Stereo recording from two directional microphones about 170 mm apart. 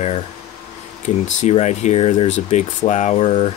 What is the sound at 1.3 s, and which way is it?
Speech, 40° left (ahead or behind).